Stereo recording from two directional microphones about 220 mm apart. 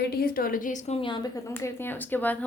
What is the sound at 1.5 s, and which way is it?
Speech, 10° left (ahead or behind).